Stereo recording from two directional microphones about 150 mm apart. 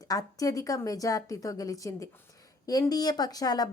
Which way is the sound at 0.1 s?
25° left (ahead or behind).